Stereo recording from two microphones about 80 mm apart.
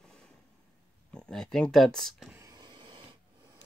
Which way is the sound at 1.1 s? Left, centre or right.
Centre.